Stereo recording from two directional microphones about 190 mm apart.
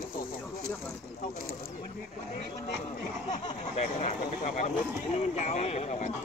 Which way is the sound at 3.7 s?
40° left (ahead or behind).